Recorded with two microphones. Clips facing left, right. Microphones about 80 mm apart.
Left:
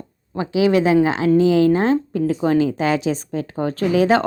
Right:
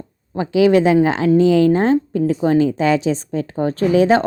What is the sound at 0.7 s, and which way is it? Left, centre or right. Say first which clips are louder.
A woman's voice: even; right.